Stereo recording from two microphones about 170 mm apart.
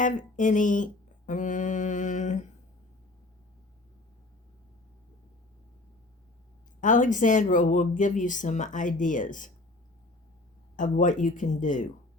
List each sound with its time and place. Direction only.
0.0 s speech: 50° left (ahead or behind)
6.8 s speech: 50° left (ahead or behind)
10.8 s speech: 50° left (ahead or behind)